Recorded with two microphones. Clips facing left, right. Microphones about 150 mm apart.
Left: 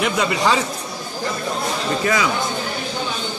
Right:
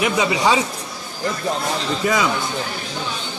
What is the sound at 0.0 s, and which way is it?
Speech, 5° right (ahead or behind).